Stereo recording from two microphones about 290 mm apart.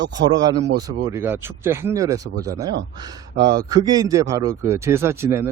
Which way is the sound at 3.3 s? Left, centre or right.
Right.